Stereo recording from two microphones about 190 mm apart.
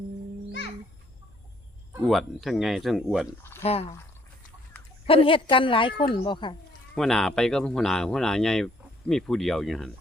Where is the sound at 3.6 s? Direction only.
35° left (ahead or behind).